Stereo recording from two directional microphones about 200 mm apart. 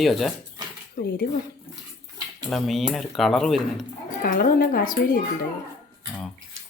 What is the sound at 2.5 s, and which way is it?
Speech, centre (ahead or behind).